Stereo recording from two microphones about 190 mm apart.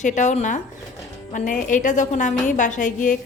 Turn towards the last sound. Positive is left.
turn(degrees=40)  # may be behind; listen again after turning